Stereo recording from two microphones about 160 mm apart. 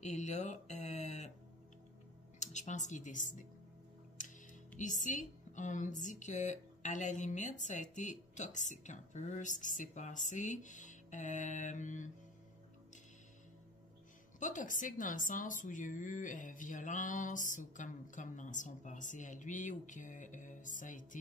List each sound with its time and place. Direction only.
0.0 s a sound: 45° left (ahead or behind)
2.4 s a woman's voice: 50° left (ahead or behind)
4.7 s a woman's voice: 50° left (ahead or behind)
14.4 s a woman's voice: 55° left (ahead or behind)